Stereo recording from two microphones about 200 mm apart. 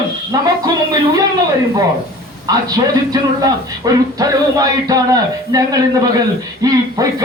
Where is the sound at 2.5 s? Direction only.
20° right (ahead or behind).